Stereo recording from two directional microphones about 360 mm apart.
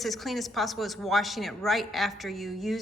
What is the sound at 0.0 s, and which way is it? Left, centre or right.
A woman's voice, centre.